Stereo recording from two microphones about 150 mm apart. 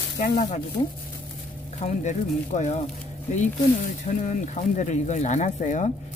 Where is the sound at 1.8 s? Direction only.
50° left (ahead or behind).